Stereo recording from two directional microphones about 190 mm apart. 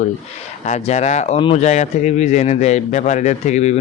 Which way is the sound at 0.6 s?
35° left (ahead or behind).